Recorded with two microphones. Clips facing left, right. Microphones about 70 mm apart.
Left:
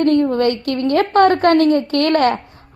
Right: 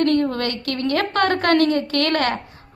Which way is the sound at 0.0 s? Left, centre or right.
Left.